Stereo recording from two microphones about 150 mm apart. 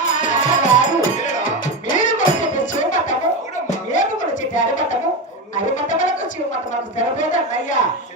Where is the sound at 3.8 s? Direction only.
55° left (ahead or behind).